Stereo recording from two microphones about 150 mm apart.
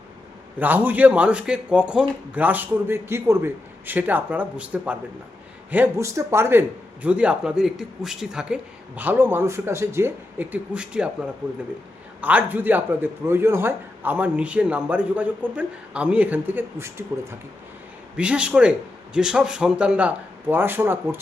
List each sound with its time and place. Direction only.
0.6 s a man's voice: 10° right (ahead or behind)
18.2 s a man's voice: 5° right (ahead or behind)